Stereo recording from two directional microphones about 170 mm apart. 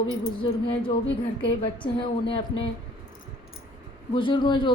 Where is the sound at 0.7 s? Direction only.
30° left (ahead or behind).